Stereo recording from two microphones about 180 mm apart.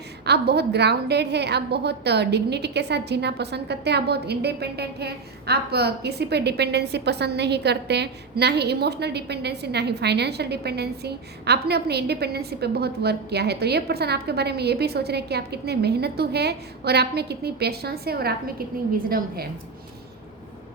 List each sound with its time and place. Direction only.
0.3 s a woman's voice: 65° right (ahead or behind)